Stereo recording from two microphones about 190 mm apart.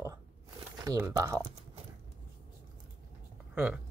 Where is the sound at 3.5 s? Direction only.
10° right (ahead or behind).